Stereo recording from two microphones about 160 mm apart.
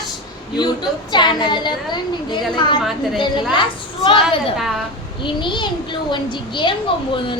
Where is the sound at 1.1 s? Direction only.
30° left (ahead or behind).